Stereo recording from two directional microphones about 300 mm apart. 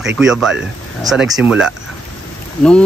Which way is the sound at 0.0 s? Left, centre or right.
Centre.